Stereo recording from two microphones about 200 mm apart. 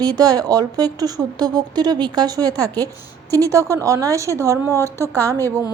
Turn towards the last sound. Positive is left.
turn(degrees=-15)  # may be behind; listen again after turning